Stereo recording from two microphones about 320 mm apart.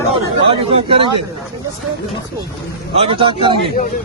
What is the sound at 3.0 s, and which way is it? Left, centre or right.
Speech, centre.